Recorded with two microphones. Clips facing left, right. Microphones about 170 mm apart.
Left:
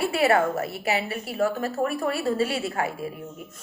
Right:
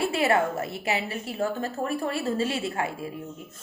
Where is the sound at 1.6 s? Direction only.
30° right (ahead or behind).